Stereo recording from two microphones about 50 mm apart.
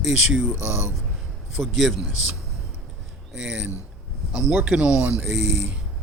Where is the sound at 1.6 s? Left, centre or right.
Centre.